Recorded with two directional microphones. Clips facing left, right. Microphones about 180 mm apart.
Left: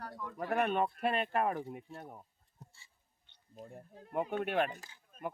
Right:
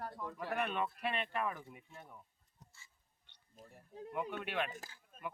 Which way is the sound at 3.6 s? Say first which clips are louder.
Left 1 dB; 45° left (ahead or behind).